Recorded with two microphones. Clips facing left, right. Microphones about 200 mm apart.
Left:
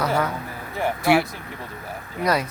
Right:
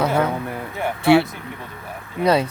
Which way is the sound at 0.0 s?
25° right (ahead or behind).